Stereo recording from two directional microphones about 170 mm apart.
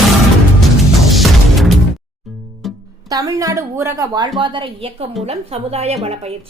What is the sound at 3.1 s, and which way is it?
A woman's voice, 20° right (ahead or behind).